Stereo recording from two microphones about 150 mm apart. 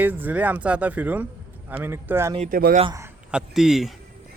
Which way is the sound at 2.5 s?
75° right (ahead or behind).